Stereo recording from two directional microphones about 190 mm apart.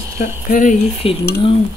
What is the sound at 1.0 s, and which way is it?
Speech, 30° left (ahead or behind).